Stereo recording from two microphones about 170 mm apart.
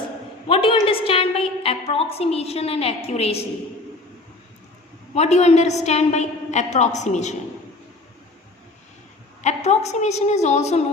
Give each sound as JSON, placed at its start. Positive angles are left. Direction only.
{"t": 0.4, "sound": "a woman's voice", "side_deg": 30}
{"t": 5.1, "sound": "a woman's voice", "side_deg": 40}
{"t": 9.4, "sound": "a woman's voice", "side_deg": 40}